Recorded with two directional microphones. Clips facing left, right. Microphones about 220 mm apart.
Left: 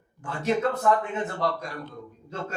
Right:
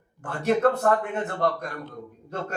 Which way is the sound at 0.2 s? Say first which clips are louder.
Right 3 dB; 55° right (ahead or behind).